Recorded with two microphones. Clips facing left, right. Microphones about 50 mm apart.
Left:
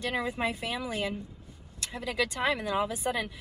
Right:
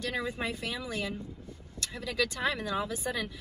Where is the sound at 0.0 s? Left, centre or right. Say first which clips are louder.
Left 3 dB; left.